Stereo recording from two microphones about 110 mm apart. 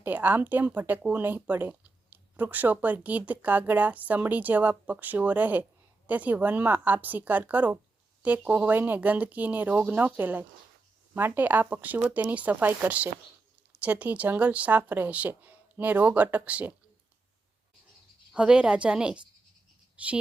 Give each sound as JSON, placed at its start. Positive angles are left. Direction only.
{"t": 0.0, "sound": "speech", "side_deg": -15}
{"t": 18.3, "sound": "speech", "side_deg": -10}